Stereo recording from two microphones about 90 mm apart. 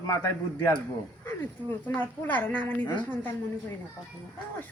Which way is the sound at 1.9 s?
20° left (ahead or behind).